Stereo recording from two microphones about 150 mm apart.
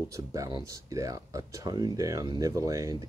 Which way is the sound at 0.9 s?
20° right (ahead or behind).